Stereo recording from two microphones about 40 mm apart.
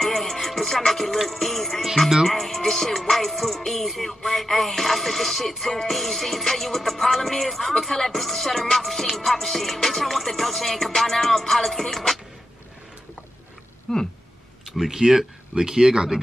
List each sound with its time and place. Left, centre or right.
0.0 s music: centre
13.9 s music: centre
14.8 s speech: centre